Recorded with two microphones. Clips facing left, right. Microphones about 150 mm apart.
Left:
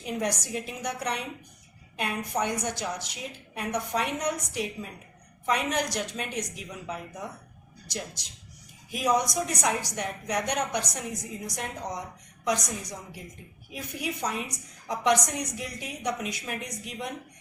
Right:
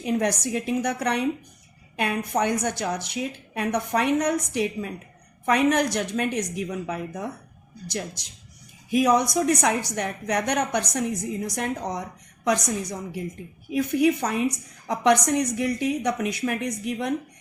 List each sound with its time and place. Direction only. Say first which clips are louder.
0.0 s a woman's voice: right 6 dB; 65° right (ahead or behind)
9.0 s a woman's voice: right 6 dB; 65° right (ahead or behind)